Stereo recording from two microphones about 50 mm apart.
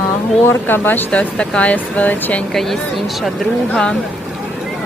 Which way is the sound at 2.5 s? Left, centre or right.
Centre.